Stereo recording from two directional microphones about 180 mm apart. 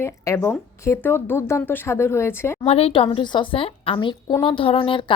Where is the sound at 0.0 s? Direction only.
15° left (ahead or behind).